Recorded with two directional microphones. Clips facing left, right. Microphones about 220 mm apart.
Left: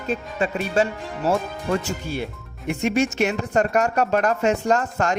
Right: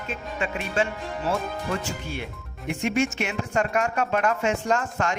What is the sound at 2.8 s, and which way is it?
A woman's voice, 35° left (ahead or behind).